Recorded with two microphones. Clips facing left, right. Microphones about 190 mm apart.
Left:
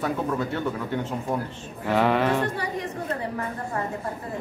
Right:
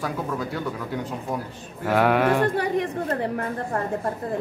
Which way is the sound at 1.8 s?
5° right (ahead or behind).